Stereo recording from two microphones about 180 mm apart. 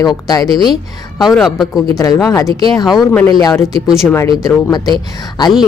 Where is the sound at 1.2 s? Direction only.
Centre (ahead or behind).